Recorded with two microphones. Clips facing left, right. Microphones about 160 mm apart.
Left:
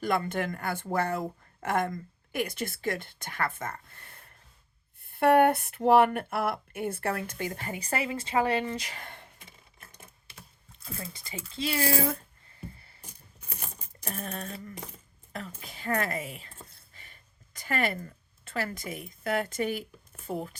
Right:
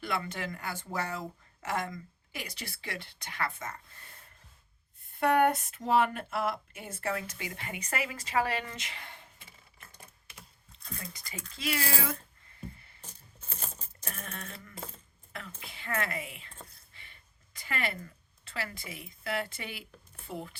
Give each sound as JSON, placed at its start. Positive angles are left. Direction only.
{"t": 0.0, "sound": "speech", "side_deg": 45}
{"t": 5.2, "sound": "speech", "side_deg": 60}
{"t": 9.9, "sound": "typing", "side_deg": 20}
{"t": 11.0, "sound": "speech", "side_deg": 25}
{"t": 13.0, "sound": "a sound", "side_deg": 10}
{"t": 14.1, "sound": "a sound", "side_deg": 35}
{"t": 15.3, "sound": "a woman's voice", "side_deg": 40}